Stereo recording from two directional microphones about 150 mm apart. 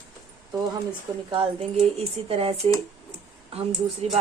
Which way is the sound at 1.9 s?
40° right (ahead or behind).